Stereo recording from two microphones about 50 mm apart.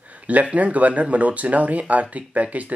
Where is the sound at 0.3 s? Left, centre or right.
Right.